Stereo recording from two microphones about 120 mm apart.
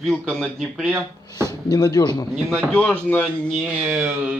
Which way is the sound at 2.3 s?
5° left (ahead or behind).